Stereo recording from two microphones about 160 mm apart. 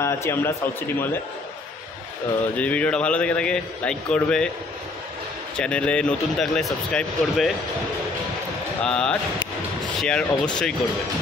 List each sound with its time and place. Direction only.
0.0 s a man's voice: 15° left (ahead or behind)
2.5 s a man's voice: 10° left (ahead or behind)
5.6 s speech: 5° left (ahead or behind)
8.8 s speech: 5° left (ahead or behind)